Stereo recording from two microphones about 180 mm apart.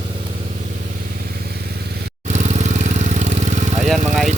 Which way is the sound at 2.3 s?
40° right (ahead or behind).